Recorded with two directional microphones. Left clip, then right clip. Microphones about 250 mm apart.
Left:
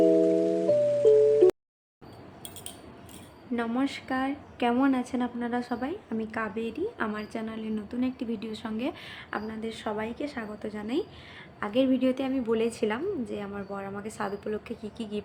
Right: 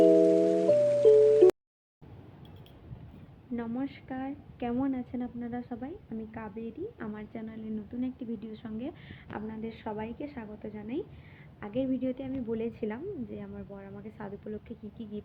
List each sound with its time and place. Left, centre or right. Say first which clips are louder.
0.0 s music: right 1 dB; centre
3.5 s a woman's voice: left 7 dB; centre